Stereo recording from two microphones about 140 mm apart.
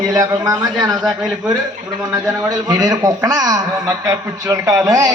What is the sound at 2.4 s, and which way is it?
A man's voice, 25° right (ahead or behind).